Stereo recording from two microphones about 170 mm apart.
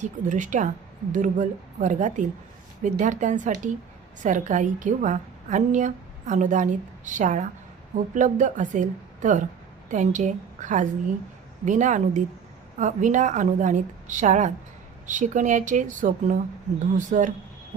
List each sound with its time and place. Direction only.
0.0 s a woman's voice: 45° right (ahead or behind)